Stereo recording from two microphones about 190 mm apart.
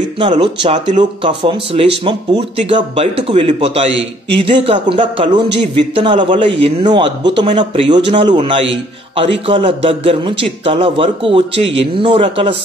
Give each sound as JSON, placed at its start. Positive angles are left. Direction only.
{"t": 0.2, "sound": "a man's voice", "side_deg": -25}